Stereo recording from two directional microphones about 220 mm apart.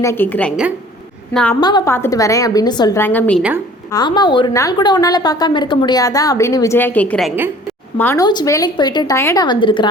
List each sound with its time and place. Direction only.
0.0 s a woman's voice: 10° left (ahead or behind)
1.6 s a woman's voice: 15° left (ahead or behind)
3.9 s a woman's voice: 20° left (ahead or behind); by 7.5 s 5° right (ahead or behind)
7.9 s a woman's voice: 10° left (ahead or behind)